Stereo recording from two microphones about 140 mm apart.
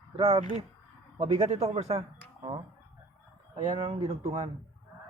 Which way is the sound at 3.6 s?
50° right (ahead or behind).